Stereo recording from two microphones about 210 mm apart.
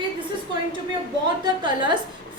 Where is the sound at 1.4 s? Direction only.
20° right (ahead or behind).